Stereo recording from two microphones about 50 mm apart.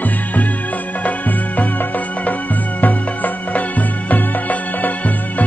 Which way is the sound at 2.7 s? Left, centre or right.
Left.